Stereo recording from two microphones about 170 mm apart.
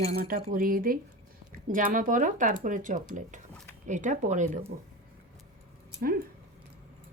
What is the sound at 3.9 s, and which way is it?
Speech, 45° right (ahead or behind).